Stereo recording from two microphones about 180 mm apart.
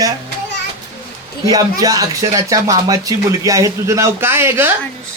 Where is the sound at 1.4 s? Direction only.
20° right (ahead or behind).